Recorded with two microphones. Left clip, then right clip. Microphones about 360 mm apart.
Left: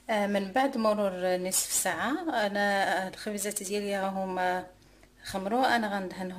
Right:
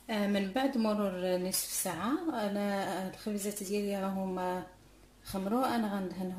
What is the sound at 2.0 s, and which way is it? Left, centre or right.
Speech, left.